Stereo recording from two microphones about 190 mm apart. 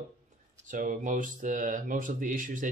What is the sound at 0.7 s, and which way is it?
Speech, 45° right (ahead or behind).